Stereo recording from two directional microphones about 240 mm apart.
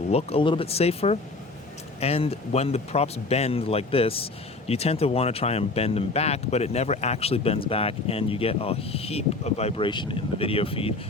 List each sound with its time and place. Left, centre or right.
0.1 s speech: left